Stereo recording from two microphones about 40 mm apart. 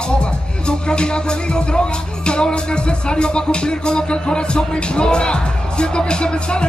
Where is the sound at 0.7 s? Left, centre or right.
Left.